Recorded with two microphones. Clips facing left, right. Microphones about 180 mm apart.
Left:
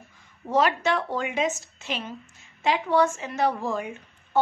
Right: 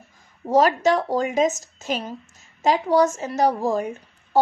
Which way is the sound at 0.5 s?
40° right (ahead or behind).